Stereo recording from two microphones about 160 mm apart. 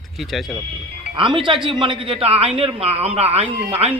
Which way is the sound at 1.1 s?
30° right (ahead or behind).